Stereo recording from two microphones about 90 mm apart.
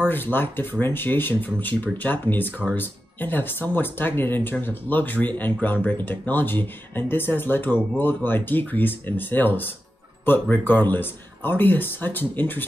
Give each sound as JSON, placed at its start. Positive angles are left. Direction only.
{"t": 0.1, "sound": "speech", "side_deg": 20}